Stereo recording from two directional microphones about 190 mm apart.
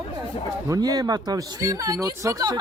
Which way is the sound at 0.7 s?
20° right (ahead or behind).